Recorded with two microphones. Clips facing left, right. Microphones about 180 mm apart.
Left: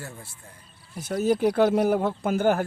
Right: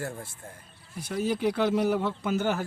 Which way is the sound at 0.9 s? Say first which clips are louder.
Left 5 dB; 45° left (ahead or behind).